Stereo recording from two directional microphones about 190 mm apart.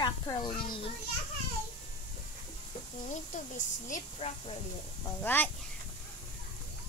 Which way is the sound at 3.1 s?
40° left (ahead or behind).